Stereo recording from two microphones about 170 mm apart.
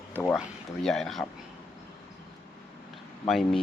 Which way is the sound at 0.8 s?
5° left (ahead or behind).